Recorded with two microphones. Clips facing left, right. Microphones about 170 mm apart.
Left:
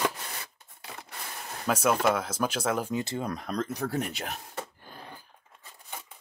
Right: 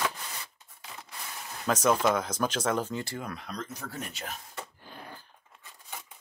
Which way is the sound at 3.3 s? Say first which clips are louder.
Left 7 dB; 50° left (ahead or behind).